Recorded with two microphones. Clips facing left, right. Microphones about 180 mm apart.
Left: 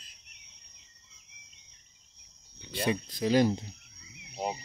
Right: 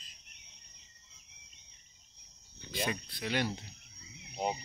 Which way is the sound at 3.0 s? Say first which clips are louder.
Left 10 dB; 40° left (ahead or behind).